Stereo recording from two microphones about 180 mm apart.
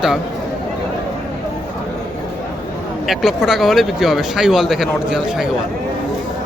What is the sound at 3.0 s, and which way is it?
Speech, centre (ahead or behind).